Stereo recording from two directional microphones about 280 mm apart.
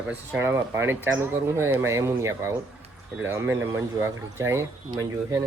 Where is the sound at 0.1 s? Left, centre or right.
Centre.